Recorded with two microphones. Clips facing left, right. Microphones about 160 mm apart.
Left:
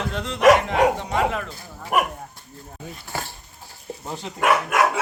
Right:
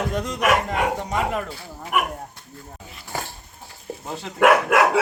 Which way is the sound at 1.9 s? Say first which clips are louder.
Left 2 dB; 40° left (ahead or behind).